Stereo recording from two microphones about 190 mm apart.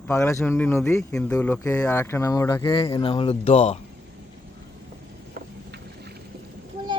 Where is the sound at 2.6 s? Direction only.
25° left (ahead or behind).